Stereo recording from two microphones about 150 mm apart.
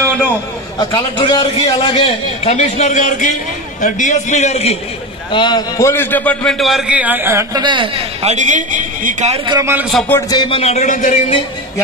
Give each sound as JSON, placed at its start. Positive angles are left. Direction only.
{"t": 0.7, "sound": "a man's voice", "side_deg": 30}
{"t": 2.5, "sound": "a man's voice", "side_deg": 50}
{"t": 5.3, "sound": "a man's voice", "side_deg": 30}
{"t": 7.6, "sound": "a woman's voice", "side_deg": -35}
{"t": 9.5, "sound": "a man's voice", "side_deg": -20}
{"t": 9.8, "sound": "a man's voice", "side_deg": 0}
{"t": 10.3, "sound": "a man's voice", "side_deg": 35}